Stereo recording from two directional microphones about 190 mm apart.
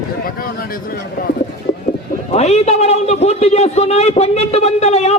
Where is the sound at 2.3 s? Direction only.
35° left (ahead or behind).